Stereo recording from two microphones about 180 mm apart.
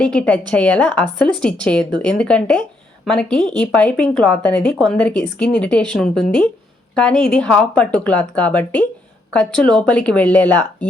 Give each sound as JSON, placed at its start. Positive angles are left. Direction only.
{"t": 0.0, "sound": "speech", "side_deg": 5}